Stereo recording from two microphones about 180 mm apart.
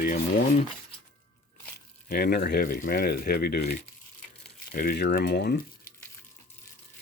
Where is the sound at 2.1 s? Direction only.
60° left (ahead or behind).